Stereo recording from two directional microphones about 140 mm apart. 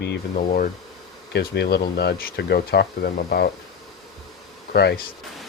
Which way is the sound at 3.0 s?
90° left.